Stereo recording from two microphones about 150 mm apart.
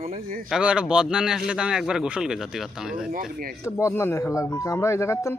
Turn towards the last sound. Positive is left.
turn(degrees=15)  # may be behind; listen again after turning